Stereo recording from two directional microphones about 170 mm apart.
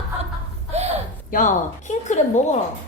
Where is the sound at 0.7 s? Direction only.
40° right (ahead or behind).